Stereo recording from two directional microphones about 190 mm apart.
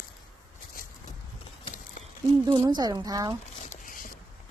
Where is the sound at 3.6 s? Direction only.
40° left (ahead or behind).